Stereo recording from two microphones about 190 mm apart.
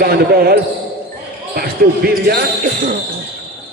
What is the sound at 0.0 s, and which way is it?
Speech, 55° right (ahead or behind).